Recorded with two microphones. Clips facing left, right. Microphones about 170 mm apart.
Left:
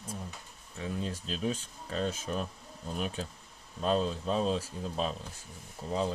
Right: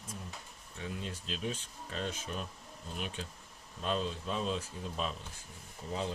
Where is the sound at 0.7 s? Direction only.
40° left (ahead or behind).